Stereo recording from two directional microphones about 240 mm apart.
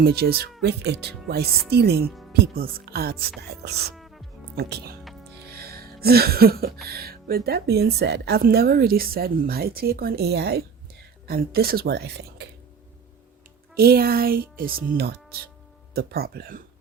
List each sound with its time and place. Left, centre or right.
0.0 s a woman's voice: right
2.0 s music: centre
2.3 s a woman's voice: right
3.9 s music: centre
4.5 s a woman's voice: right
5.5 s music: right
6.8 s a woman's voice: right
13.7 s a woman's voice: right
16.0 s a woman's voice: right